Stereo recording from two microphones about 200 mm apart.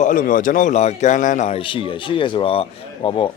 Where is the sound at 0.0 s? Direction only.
40° left (ahead or behind).